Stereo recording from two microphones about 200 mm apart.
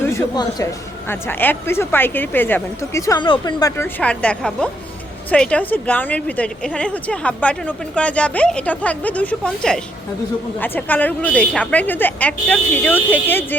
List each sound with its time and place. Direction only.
0.0 s a woman's voice: 15° left (ahead or behind)